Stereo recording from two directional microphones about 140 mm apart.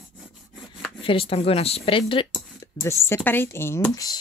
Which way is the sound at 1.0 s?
40° left (ahead or behind).